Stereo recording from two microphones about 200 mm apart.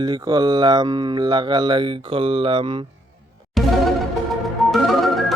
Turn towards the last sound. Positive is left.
turn(degrees=0)  # may be behind; listen again after turning